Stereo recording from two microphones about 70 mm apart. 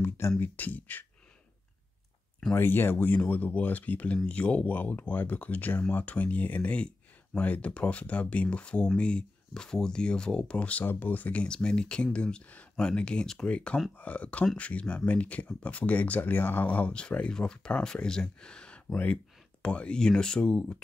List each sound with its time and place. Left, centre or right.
0.4 s speech: left
2.5 s speech: left
11.4 s speech: centre